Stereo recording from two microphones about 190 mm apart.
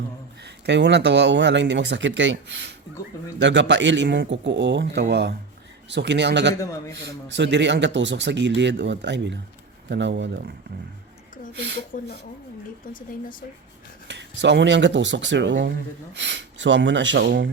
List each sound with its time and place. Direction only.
0.4 s speech: 65° right (ahead or behind)
6.6 s a man's voice: 15° left (ahead or behind)
7.3 s speech: 65° right (ahead or behind)
11.9 s speech: 40° left (ahead or behind)
14.1 s speech: 65° right (ahead or behind)